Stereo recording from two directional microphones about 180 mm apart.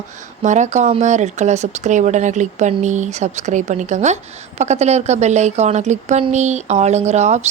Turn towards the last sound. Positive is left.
turn(degrees=-40)  # may be behind; listen again after turning